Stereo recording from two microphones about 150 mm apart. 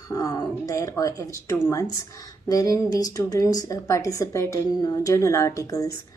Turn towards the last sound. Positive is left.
turn(degrees=20)  # may be behind; listen again after turning